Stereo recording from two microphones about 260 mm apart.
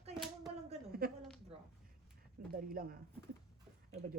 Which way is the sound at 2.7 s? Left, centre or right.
Right.